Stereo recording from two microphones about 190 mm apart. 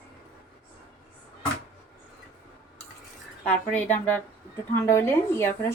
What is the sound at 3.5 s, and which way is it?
A woman's voice, 5° left (ahead or behind).